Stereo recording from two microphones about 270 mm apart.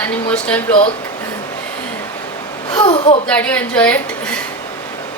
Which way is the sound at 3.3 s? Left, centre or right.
Centre.